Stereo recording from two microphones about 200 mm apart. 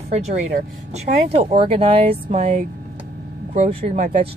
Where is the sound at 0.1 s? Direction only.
35° right (ahead or behind).